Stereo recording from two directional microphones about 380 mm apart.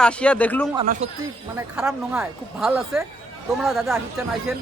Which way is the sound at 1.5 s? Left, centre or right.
Centre.